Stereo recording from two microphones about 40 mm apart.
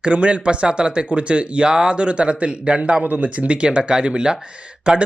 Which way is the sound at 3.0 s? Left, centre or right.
Right.